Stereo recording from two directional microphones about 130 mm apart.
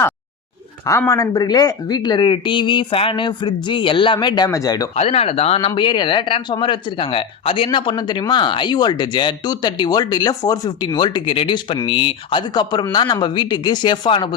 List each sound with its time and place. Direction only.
0.9 s speech: 25° left (ahead or behind)
4.9 s speech: 50° left (ahead or behind)